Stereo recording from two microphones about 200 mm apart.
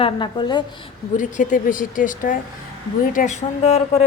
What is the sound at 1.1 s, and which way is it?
Speech, 40° left (ahead or behind).